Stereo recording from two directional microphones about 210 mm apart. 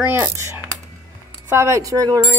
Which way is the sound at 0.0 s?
10° right (ahead or behind).